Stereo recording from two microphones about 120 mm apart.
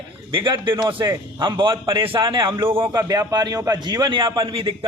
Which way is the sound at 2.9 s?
35° right (ahead or behind).